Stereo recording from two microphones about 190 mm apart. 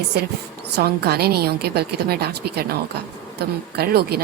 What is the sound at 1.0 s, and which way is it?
Speech, 55° right (ahead or behind).